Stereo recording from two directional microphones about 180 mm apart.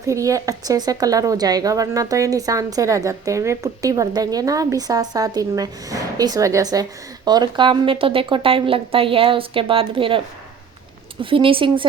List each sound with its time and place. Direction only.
0.0 s a woman's voice: 15° right (ahead or behind)
11.2 s a woman's voice: 30° right (ahead or behind)